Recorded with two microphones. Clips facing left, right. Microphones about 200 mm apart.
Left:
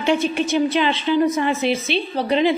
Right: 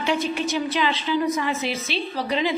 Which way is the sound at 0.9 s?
60° left (ahead or behind).